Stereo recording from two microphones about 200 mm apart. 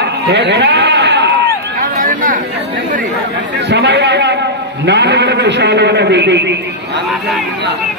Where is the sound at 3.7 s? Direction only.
55° right (ahead or behind).